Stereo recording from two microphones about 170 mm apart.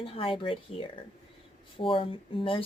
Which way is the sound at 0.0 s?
35° left (ahead or behind).